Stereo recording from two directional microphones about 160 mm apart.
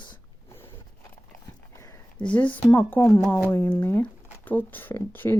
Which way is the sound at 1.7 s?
20° left (ahead or behind).